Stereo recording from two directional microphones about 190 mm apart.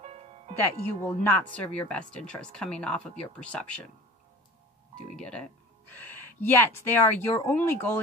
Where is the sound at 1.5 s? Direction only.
5° left (ahead or behind).